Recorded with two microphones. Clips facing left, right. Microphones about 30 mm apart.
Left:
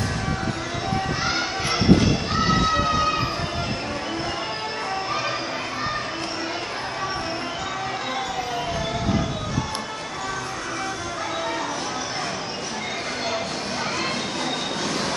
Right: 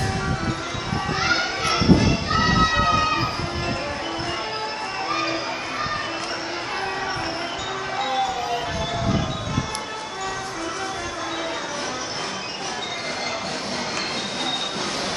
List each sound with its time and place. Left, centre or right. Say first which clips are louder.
1.2 s music: right 3 dB; right
2.7 s emergency vehicle: right 2 dB; right